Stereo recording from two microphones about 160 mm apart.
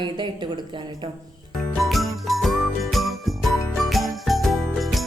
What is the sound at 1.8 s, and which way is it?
Jingle, centre (ahead or behind).